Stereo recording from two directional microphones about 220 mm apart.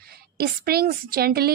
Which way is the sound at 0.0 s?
45° right (ahead or behind).